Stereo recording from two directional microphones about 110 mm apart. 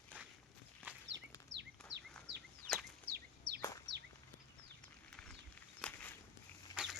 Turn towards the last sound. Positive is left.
turn(degrees=-5)  # may be behind; listen again after turning